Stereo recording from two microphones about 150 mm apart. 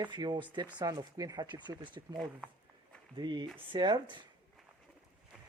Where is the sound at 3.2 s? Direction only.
30° right (ahead or behind).